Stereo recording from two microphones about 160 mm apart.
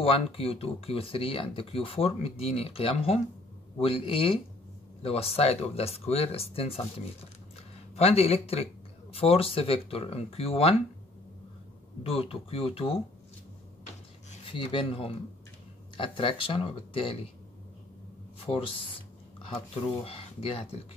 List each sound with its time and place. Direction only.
0.0 s speech: 35° left (ahead or behind)
7.9 s speech: 40° left (ahead or behind)
12.0 s speech: 35° left (ahead or behind)
14.4 s speech: 30° left (ahead or behind)
18.5 s speech: 10° left (ahead or behind)
20.0 s speech: 40° left (ahead or behind)